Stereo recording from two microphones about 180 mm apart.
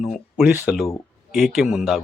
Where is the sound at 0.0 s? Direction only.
Centre (ahead or behind).